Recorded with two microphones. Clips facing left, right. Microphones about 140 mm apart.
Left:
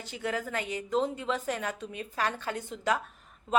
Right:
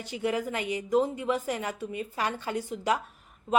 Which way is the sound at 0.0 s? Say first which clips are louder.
Right 4 dB; 10° right (ahead or behind).